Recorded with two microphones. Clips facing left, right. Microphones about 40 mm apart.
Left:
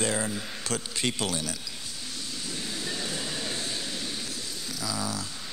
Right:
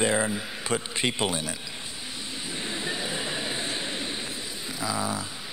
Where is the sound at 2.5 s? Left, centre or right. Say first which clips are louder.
Right 4 dB; right.